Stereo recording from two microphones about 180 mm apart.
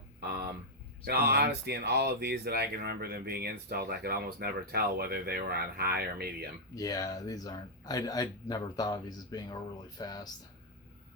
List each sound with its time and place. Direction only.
1.0 s speech: 60° right (ahead or behind)
6.7 s speech: 20° left (ahead or behind)